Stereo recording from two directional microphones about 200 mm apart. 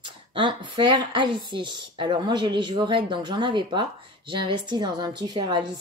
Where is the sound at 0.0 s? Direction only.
25° right (ahead or behind).